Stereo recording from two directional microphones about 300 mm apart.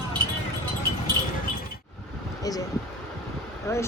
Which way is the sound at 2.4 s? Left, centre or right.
Centre.